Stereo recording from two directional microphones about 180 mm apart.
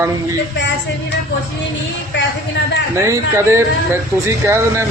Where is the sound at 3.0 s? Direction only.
15° right (ahead or behind).